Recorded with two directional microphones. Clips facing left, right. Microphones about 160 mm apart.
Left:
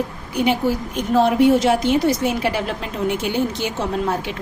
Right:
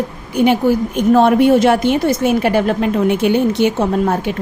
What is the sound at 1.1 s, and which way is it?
A woman's voice, 60° right (ahead or behind).